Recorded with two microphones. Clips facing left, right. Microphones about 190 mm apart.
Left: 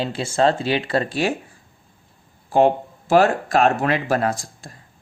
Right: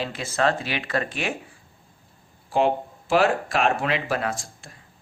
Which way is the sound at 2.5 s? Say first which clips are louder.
Left 5 dB; 45° left (ahead or behind).